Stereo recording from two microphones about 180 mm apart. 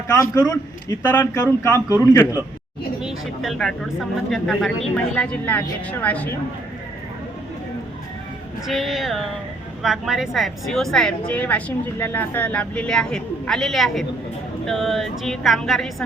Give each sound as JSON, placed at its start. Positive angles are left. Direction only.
{"t": 0.1, "sound": "a man's voice", "side_deg": 20}
{"t": 3.0, "sound": "speech", "side_deg": 0}
{"t": 8.6, "sound": "speech", "side_deg": 0}